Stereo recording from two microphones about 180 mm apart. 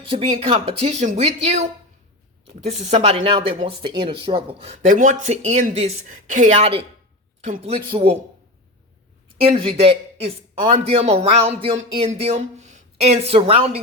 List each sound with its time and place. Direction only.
0.0 s speech: 30° right (ahead or behind)
2.5 s speech: 35° right (ahead or behind)
9.3 s speech: 30° right (ahead or behind)